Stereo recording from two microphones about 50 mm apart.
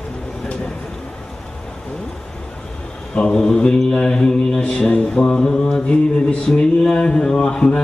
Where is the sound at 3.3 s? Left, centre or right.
Centre.